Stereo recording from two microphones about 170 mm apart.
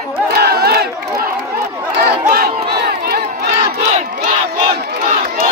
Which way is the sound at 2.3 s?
70° right (ahead or behind).